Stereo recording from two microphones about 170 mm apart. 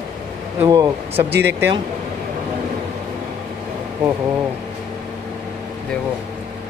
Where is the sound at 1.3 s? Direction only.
80° right.